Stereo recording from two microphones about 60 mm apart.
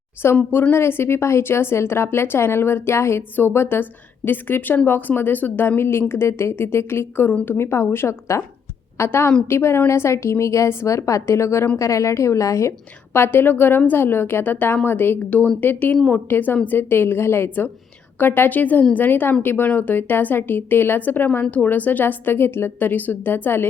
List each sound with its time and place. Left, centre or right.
0.2 s a woman's voice: left
13.1 s a woman's voice: left
15.3 s a woman's voice: left